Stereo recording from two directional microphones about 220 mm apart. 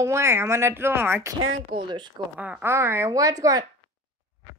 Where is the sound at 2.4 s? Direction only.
5° right (ahead or behind).